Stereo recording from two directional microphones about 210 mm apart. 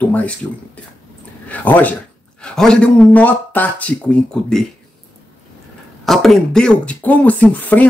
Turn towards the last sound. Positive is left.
turn(degrees=5)  # may be behind; listen again after turning